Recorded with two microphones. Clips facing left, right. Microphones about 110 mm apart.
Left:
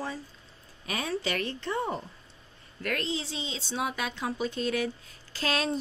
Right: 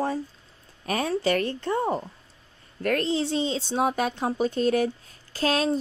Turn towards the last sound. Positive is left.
turn(degrees=-40)  # may be behind; listen again after turning